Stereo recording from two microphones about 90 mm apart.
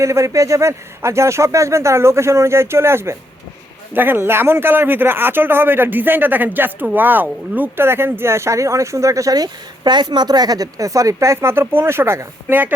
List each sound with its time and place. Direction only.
0.0 s speech: 35° right (ahead or behind)